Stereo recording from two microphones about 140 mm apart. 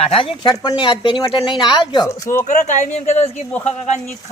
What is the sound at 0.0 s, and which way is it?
Speech, 45° left (ahead or behind).